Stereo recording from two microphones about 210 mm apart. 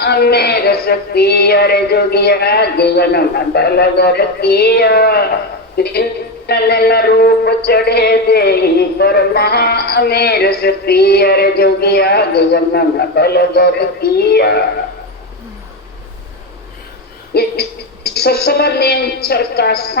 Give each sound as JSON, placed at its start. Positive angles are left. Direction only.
{"t": 0.0, "sound": "music", "side_deg": 50}
{"t": 17.3, "sound": "music", "side_deg": 50}